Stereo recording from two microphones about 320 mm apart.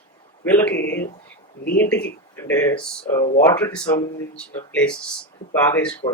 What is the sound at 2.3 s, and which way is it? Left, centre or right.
Speech, centre.